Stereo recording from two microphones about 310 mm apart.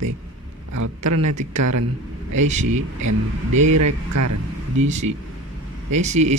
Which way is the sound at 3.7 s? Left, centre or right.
Right.